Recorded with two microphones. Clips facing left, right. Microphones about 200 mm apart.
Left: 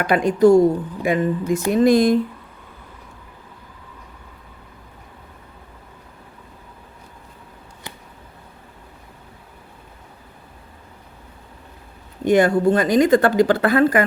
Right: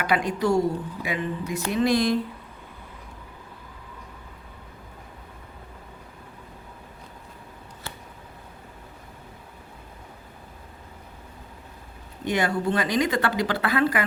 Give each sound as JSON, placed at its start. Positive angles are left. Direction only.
{"t": 0.0, "sound": "speech", "side_deg": 50}
{"t": 12.2, "sound": "speech", "side_deg": 50}